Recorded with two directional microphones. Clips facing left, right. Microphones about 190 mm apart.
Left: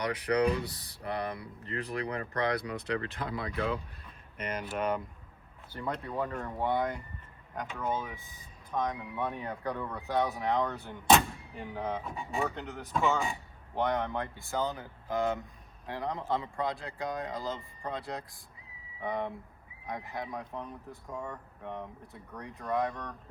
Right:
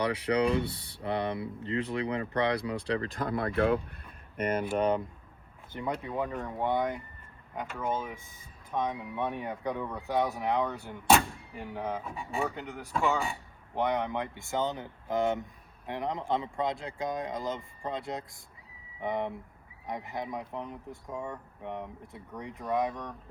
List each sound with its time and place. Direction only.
0.0 s speech: 30° right (ahead or behind); by 4.6 s 50° right (ahead or behind)
4.8 s speech: 25° right (ahead or behind)
5.7 s speech: 15° right (ahead or behind)
6.7 s speech: centre (ahead or behind)
8.7 s speech: 15° right (ahead or behind)